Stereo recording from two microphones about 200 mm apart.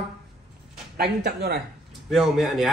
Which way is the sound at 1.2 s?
55° right (ahead or behind).